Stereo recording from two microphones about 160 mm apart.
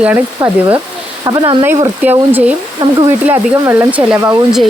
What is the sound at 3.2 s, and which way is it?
Speech, 10° right (ahead or behind).